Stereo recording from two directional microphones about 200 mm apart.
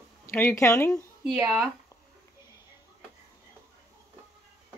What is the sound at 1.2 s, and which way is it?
Speech, 5° right (ahead or behind).